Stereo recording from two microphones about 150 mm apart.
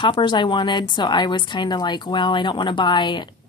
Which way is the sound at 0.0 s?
30° left (ahead or behind).